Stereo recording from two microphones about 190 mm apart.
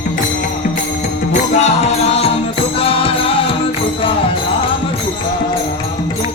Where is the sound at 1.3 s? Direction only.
35° left (ahead or behind).